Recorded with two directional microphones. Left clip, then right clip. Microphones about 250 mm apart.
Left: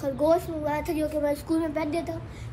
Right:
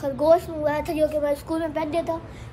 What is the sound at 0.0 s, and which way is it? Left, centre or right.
A woman's voice, centre.